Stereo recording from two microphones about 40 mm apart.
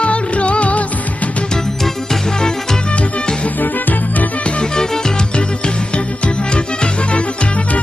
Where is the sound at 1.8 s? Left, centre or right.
Centre.